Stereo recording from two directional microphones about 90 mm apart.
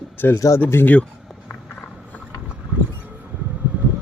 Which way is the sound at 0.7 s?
20° left (ahead or behind).